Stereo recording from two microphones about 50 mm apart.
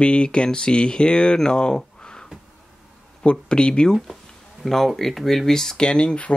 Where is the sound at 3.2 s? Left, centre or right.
Left.